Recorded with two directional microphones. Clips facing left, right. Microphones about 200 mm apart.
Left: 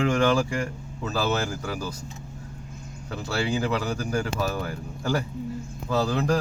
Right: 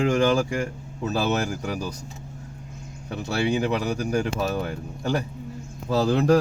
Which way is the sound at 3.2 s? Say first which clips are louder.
Right 3 dB; 20° right (ahead or behind).